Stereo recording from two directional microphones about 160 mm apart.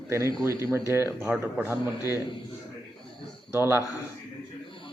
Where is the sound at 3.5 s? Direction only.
15° right (ahead or behind).